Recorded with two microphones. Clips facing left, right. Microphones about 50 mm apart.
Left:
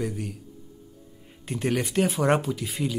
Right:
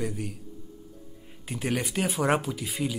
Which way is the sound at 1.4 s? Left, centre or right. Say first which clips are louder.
Left 3 dB; centre.